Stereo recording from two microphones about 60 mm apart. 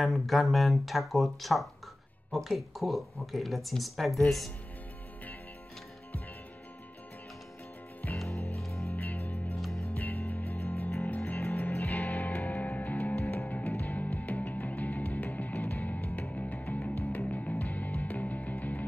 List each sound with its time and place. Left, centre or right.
0.0 s speech: centre
8.0 s music: left